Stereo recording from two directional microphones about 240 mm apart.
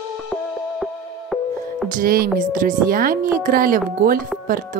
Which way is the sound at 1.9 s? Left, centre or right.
Right.